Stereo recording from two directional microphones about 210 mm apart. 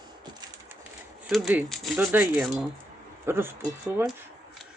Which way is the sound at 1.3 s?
Centre (ahead or behind).